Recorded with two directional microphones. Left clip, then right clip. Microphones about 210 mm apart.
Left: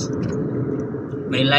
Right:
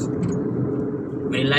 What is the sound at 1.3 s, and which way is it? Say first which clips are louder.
Speech: left 4 dB; 20° left (ahead or behind).